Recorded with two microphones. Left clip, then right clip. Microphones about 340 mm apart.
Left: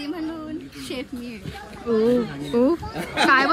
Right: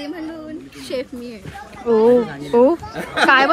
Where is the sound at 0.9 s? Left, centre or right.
Centre.